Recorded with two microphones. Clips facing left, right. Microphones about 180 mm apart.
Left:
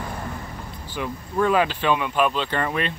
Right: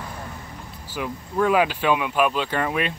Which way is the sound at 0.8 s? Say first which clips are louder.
Even; 5° right (ahead or behind).